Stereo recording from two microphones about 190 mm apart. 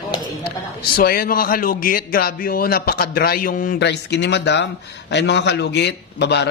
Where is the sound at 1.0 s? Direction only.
50° left (ahead or behind).